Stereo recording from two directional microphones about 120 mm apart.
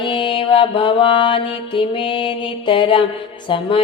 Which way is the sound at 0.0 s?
45° left (ahead or behind).